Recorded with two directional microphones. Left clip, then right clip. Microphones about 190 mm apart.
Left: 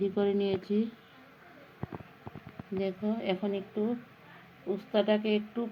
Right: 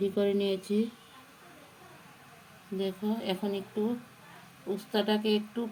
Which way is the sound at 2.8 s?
5° left (ahead or behind).